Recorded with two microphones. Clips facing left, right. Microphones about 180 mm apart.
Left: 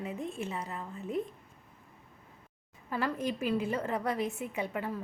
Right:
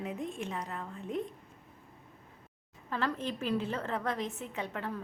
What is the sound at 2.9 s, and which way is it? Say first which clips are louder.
A woman's voice: left 2 dB; 10° left (ahead or behind).